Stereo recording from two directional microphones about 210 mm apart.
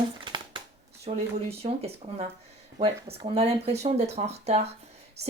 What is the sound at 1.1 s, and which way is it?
Speech, 30° right (ahead or behind).